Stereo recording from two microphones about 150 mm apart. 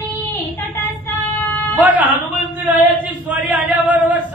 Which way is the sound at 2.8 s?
10° right (ahead or behind).